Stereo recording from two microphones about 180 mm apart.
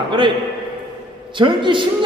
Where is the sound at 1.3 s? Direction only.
25° right (ahead or behind).